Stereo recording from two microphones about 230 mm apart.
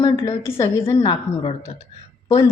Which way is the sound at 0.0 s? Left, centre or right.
Left.